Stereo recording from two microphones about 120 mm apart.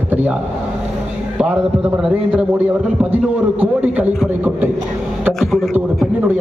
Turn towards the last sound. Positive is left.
turn(degrees=0)  # may be behind; listen again after turning